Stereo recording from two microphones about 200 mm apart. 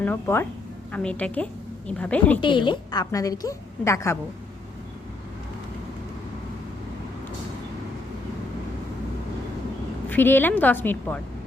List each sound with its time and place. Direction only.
0.0 s a woman's voice: 10° left (ahead or behind)
2.4 s a woman's voice: 25° left (ahead or behind)
10.1 s a woman's voice: 10° left (ahead or behind)